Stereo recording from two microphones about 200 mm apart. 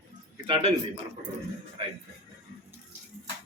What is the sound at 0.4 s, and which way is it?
Speech, 25° right (ahead or behind).